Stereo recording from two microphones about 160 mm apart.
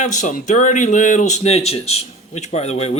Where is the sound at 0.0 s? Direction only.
50° left (ahead or behind).